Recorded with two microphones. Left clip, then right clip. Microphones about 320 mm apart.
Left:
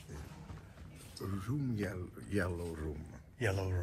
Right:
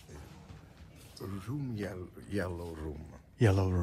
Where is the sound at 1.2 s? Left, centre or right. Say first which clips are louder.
Left 1 dB; right.